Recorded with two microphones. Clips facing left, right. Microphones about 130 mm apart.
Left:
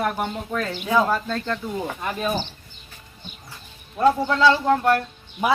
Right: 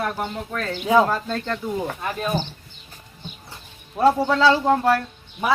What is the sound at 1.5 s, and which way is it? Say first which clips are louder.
Speech: right 2 dB; 5° left (ahead or behind).